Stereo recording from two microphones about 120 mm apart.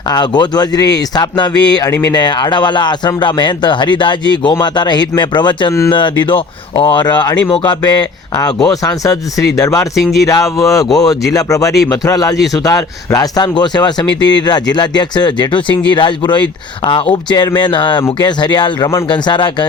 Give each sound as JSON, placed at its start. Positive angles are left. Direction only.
{"t": 0.1, "sound": "speech", "side_deg": 35}
{"t": 1.9, "sound": "speech", "side_deg": 20}
{"t": 2.1, "sound": "speech", "side_deg": 35}
{"t": 6.8, "sound": "speech", "side_deg": 35}
{"t": 9.9, "sound": "speech", "side_deg": 0}
{"t": 10.2, "sound": "speech", "side_deg": 25}